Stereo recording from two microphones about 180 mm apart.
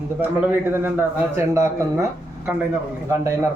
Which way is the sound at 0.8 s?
15° right (ahead or behind).